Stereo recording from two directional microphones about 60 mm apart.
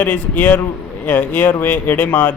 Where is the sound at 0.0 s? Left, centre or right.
Left.